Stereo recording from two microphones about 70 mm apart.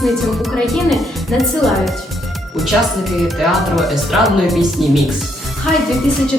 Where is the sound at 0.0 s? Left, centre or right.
Centre.